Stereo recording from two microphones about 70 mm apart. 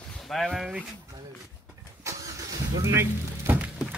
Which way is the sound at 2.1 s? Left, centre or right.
Right.